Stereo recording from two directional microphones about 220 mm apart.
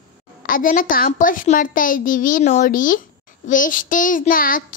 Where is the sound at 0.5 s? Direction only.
40° left (ahead or behind).